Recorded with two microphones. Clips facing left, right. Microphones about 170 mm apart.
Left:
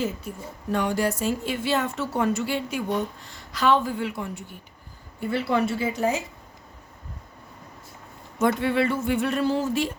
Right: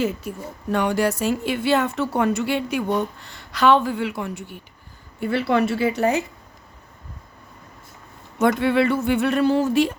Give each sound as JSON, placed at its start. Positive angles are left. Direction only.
{"t": 0.0, "sound": "speech", "side_deg": -70}
{"t": 8.4, "sound": "speech", "side_deg": -70}